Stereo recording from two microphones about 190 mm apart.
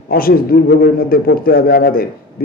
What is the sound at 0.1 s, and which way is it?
A man's voice, 50° left (ahead or behind).